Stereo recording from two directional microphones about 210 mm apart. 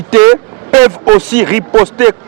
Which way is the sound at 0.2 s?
15° right (ahead or behind).